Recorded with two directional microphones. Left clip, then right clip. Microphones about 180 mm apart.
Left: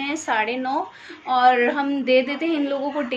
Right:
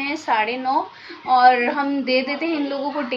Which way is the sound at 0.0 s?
20° left (ahead or behind).